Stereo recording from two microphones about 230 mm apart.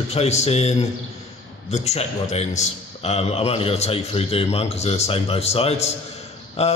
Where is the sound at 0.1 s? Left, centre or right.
Left.